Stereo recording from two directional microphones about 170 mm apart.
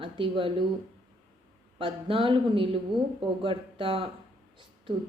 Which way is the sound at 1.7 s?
30° right (ahead or behind).